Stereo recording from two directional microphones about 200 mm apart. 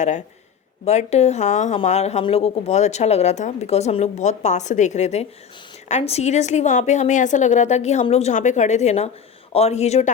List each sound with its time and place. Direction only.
0.9 s speech: 35° left (ahead or behind)